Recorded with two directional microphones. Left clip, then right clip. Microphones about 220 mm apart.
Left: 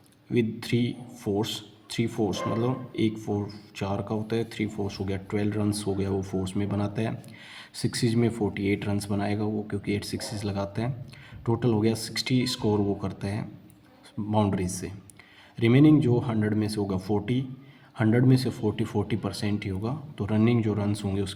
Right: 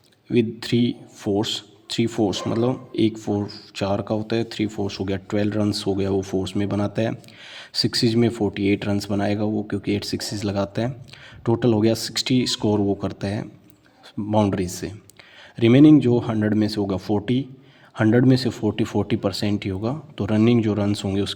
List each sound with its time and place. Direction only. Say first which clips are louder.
0.3 s a man's voice: right 6 dB; 30° right (ahead or behind)